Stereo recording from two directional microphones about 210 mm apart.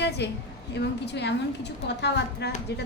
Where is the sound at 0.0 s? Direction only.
55° left (ahead or behind).